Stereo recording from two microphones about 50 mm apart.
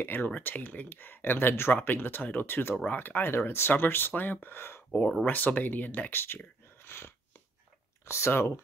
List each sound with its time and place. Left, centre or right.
0.0 s speech: left
5.2 s speech: left
6.1 s speech: left
8.1 s speech: left